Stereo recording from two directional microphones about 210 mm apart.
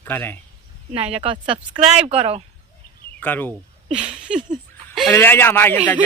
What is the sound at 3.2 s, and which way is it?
Speech, 10° left (ahead or behind).